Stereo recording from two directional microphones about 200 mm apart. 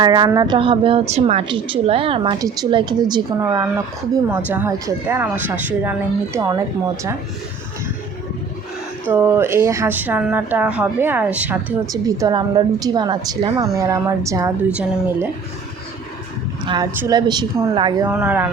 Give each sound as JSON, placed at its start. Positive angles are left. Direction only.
{"t": 0.0, "sound": "a woman's voice", "side_deg": -20}
{"t": 9.0, "sound": "a woman's voice", "side_deg": -10}
{"t": 11.9, "sound": "a woman's voice", "side_deg": -15}
{"t": 16.6, "sound": "a woman's voice", "side_deg": -20}
{"t": 18.1, "sound": "a woman's voice", "side_deg": -10}